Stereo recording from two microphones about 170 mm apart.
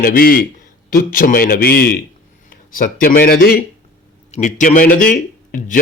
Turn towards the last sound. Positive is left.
turn(degrees=50)  # may be behind; listen again after turning